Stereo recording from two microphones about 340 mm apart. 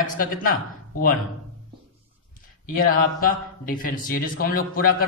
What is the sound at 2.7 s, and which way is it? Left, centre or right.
Speech, left.